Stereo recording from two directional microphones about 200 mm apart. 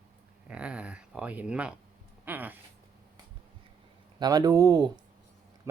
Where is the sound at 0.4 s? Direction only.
5° right (ahead or behind).